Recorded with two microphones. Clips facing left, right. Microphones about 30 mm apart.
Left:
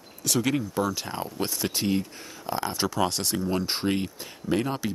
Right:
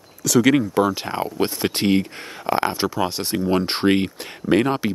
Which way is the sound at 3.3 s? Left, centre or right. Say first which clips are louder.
Right 6 dB; right.